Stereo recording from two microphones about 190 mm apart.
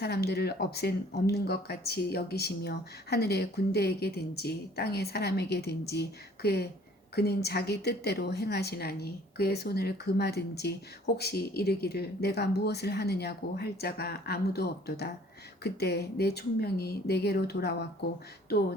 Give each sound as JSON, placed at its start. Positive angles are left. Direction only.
{"t": 0.0, "sound": "a woman's voice", "side_deg": 60}